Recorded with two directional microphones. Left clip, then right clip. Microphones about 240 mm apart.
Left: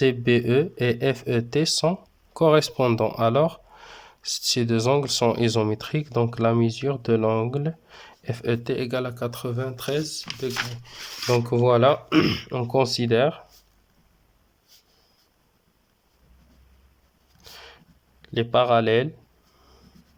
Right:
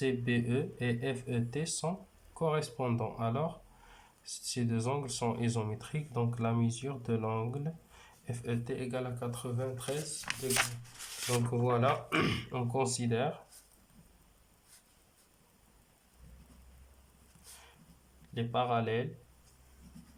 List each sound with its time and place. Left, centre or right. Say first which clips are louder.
0.0 s speech: left 13 dB; left
11.5 s speech: left 13 dB; left
18.3 s speech: left 13 dB; left